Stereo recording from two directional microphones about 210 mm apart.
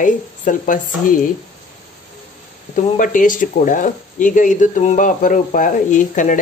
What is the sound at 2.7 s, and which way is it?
Speech, 40° left (ahead or behind).